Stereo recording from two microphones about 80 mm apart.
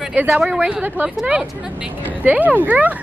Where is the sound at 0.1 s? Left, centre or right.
Right.